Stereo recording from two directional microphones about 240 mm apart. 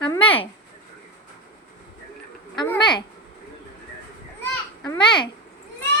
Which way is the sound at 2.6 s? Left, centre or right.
Centre.